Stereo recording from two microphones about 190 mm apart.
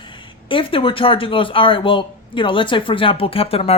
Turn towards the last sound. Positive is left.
turn(degrees=30)  # may be behind; listen again after turning